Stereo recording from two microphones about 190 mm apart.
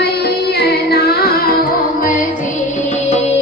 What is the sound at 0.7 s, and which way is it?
Music, 55° left (ahead or behind).